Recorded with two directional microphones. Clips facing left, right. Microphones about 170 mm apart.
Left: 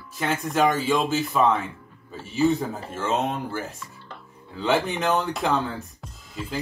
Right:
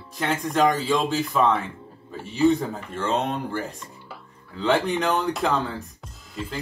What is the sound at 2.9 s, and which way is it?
Speech, 5° left (ahead or behind).